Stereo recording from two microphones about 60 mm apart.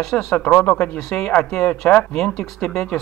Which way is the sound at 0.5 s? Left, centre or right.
Left.